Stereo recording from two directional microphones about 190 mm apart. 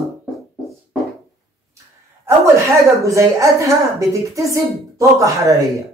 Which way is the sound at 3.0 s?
15° right (ahead or behind).